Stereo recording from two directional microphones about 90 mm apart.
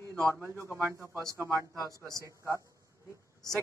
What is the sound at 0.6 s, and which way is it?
A man's voice, 25° right (ahead or behind).